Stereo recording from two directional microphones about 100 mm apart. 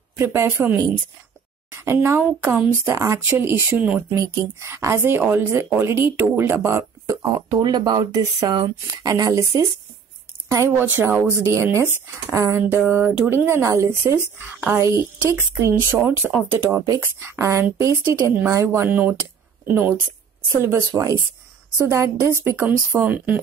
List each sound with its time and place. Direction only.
0.2 s a woman's voice: 25° right (ahead or behind)
7.4 s a woman's voice: 45° right (ahead or behind); by 12.8 s 30° right (ahead or behind)
12.8 s speech: 10° right (ahead or behind)
13.3 s a woman's voice: 30° right (ahead or behind)
16.7 s a woman's voice: 35° right (ahead or behind)
18.9 s a woman's voice: 15° right (ahead or behind)
22.6 s speech: 15° right (ahead or behind)